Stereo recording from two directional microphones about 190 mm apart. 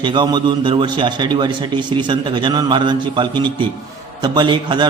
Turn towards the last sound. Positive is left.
turn(degrees=-25)  # may be behind; listen again after turning